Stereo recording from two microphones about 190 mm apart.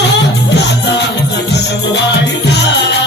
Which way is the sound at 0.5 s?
65° left (ahead or behind).